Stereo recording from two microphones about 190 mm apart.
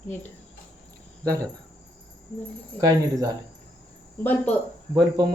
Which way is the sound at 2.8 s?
20° right (ahead or behind).